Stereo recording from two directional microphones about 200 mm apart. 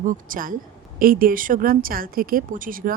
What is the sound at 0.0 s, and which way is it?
A woman's voice, 40° right (ahead or behind).